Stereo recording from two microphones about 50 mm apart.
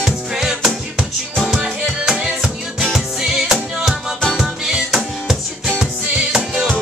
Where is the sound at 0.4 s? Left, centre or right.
Centre.